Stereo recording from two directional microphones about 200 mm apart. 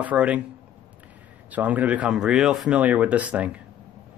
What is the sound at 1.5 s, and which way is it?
Speech, 10° right (ahead or behind).